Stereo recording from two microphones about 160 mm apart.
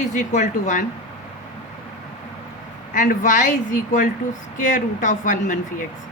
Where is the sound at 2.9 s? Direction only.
55° left (ahead or behind).